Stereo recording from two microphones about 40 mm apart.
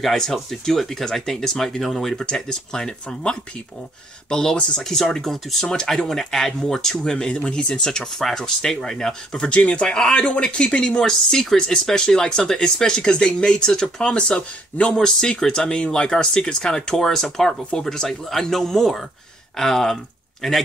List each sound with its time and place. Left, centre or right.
0.0 s speech: centre
7.0 s speech: left
9.5 s speech: left
11.1 s speech: centre
15.0 s speech: centre
18.3 s speech: centre